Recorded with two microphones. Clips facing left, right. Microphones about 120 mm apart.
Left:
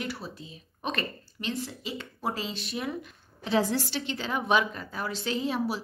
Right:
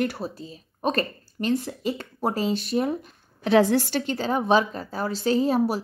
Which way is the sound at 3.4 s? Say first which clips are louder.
Right 8 dB; 65° right (ahead or behind).